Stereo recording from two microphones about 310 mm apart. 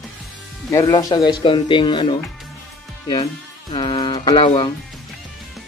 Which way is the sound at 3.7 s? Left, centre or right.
Centre.